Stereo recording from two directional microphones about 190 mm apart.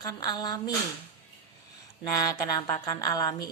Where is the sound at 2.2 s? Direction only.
20° left (ahead or behind).